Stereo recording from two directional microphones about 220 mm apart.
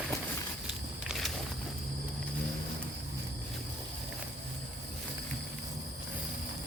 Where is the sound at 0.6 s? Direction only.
Centre (ahead or behind).